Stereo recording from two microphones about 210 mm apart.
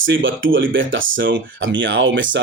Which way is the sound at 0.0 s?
65° right (ahead or behind).